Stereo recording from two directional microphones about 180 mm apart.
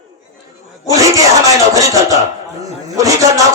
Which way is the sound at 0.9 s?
20° right (ahead or behind).